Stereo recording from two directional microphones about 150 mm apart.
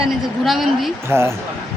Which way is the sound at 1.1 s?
15° right (ahead or behind).